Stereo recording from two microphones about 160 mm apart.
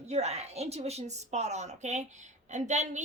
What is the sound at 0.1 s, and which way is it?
A woman's voice, 40° right (ahead or behind).